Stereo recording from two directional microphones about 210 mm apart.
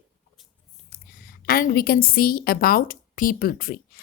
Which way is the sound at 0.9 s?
45° left (ahead or behind).